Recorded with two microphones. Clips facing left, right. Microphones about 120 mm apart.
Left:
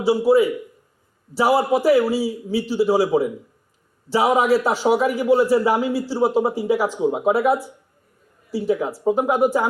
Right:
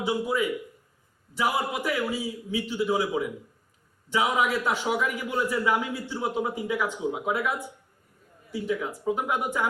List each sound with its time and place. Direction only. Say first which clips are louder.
0.0 s a man's voice: left 10 dB; 35° left (ahead or behind)